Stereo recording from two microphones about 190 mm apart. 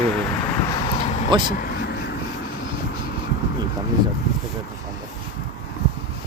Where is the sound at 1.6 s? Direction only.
55° left (ahead or behind).